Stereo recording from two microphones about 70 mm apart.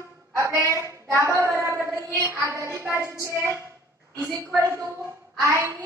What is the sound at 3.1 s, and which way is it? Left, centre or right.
Speech, right.